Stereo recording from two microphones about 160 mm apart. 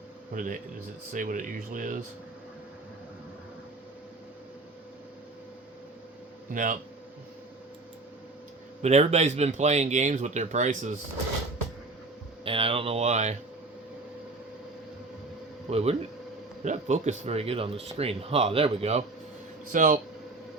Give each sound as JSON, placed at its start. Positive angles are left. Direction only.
{"t": 0.3, "sound": "speech", "side_deg": -55}
{"t": 6.5, "sound": "speech", "side_deg": -55}
{"t": 8.8, "sound": "speech", "side_deg": -45}
{"t": 12.5, "sound": "speech", "side_deg": -35}
{"t": 15.7, "sound": "speech", "side_deg": -40}
{"t": 19.7, "sound": "speech", "side_deg": -60}